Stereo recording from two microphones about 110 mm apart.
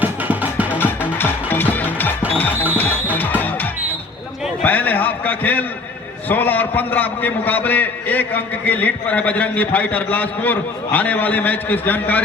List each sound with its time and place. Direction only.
0.0 s music: 15° right (ahead or behind)
0.8 s music: 20° left (ahead or behind)
4.6 s a sound: 15° left (ahead or behind)
6.2 s a man's voice: 15° left (ahead or behind)